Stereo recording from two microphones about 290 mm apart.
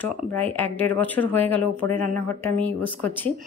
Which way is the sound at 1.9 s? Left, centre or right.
Right.